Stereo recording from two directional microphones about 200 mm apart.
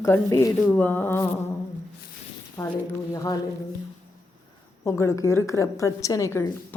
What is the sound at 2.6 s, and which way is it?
Speech, 15° left (ahead or behind).